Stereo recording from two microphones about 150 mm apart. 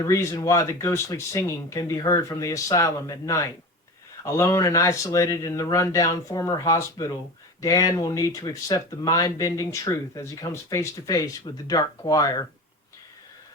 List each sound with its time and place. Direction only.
0.1 s speech: 20° left (ahead or behind)